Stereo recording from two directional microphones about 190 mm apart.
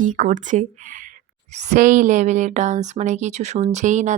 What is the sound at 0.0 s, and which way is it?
Speech, 40° right (ahead or behind).